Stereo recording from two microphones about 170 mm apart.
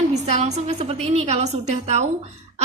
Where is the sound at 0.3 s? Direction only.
40° right (ahead or behind).